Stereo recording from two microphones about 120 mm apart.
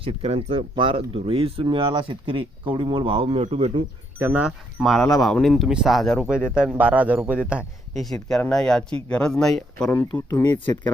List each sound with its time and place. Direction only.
0.0 s speech: 55° right (ahead or behind)
4.3 s a man's voice: 10° right (ahead or behind)
4.8 s speech: centre (ahead or behind)
6.3 s a man's voice: 5° right (ahead or behind)
8.0 s speech: 5° left (ahead or behind)
10.2 s speech: 20° left (ahead or behind)
10.4 s speech: 35° left (ahead or behind)